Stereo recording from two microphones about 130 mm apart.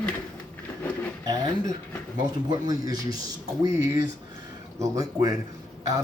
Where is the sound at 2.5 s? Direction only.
30° right (ahead or behind).